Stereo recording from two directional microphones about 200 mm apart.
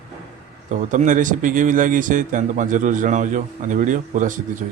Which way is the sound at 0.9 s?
40° right (ahead or behind).